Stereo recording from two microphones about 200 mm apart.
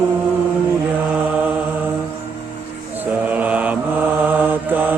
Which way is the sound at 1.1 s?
5° right (ahead or behind).